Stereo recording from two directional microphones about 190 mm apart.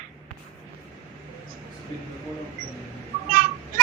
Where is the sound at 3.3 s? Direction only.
45° right (ahead or behind).